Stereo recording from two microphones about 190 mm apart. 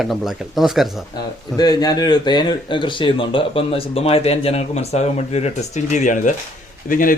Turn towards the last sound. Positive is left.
turn(degrees=45)  # may be behind; listen again after turning